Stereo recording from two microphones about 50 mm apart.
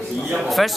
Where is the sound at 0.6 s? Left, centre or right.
Centre.